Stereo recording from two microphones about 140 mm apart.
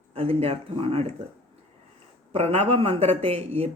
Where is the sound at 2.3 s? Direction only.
50° right (ahead or behind).